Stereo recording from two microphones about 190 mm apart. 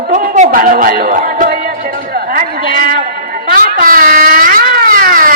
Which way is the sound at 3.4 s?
45° right (ahead or behind).